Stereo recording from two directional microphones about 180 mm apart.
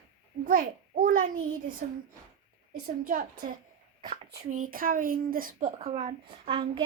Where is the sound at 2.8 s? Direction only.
50° right (ahead or behind).